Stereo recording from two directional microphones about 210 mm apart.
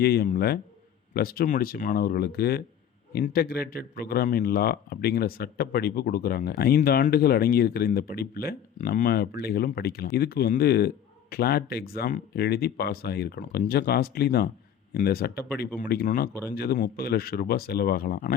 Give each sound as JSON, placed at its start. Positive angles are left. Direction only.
{"t": 0.0, "sound": "a man's voice", "side_deg": 50}